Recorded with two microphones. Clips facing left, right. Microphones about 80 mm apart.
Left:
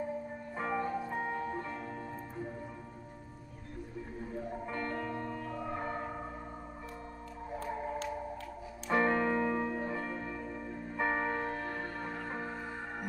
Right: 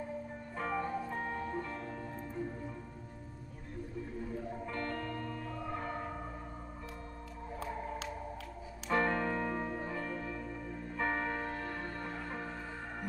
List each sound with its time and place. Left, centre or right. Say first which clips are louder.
0.6 s music: left 2 dB; centre
4.6 s music: left 2 dB; centre
8.9 s music: left 3 dB; centre